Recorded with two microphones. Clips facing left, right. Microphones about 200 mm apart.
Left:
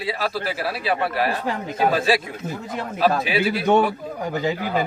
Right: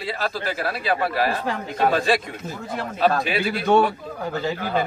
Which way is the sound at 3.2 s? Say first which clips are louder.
Left 2 dB; 5° left (ahead or behind).